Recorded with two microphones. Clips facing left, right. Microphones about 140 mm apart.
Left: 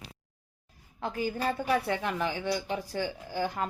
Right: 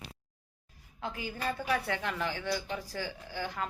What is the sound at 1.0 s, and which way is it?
Speech, 40° left (ahead or behind).